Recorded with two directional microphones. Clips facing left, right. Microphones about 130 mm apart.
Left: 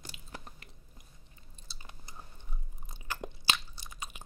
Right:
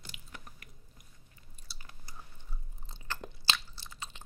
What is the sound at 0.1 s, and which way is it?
Chewing, 30° left (ahead or behind).